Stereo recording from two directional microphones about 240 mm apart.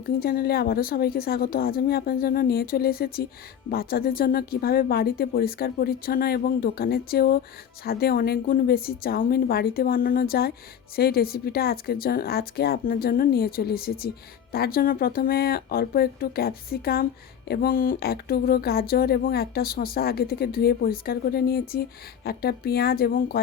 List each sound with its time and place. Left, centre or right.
0.0 s speech: left